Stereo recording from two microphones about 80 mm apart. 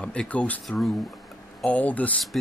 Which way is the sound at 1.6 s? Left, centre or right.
Centre.